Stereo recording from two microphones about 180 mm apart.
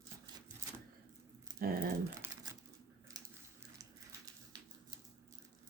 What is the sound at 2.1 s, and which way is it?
Typewriter, 15° right (ahead or behind).